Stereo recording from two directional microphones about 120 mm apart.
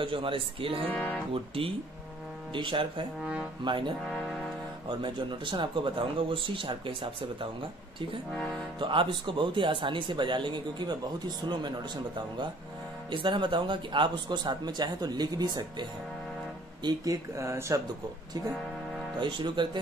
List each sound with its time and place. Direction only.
0.0 s speech: 45° right (ahead or behind)
0.8 s speech: 10° left (ahead or behind)
1.3 s speech: 50° right (ahead or behind)
4.1 s music: centre (ahead or behind)
4.8 s speech: 40° right (ahead or behind)
8.7 s speech: 40° right (ahead or behind)
13.1 s speech: 40° right (ahead or behind); by 17.7 s 25° right (ahead or behind)
19.1 s speech: 40° right (ahead or behind)